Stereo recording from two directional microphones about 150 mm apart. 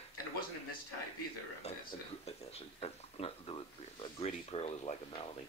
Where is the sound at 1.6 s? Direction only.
45° left (ahead or behind).